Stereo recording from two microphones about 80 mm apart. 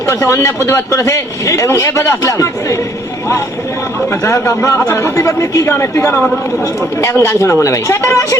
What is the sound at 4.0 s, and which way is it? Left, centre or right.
A man's voice, left.